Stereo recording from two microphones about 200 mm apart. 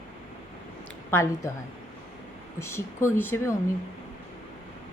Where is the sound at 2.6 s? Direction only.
10° left (ahead or behind).